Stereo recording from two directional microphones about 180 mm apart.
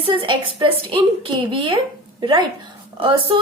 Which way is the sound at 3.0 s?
30° right (ahead or behind).